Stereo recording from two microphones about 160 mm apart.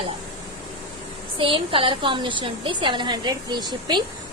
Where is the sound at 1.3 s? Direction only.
35° right (ahead or behind).